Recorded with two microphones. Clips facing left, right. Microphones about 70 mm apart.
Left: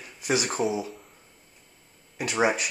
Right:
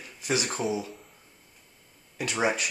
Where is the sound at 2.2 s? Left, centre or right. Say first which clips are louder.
Left 3 dB; centre.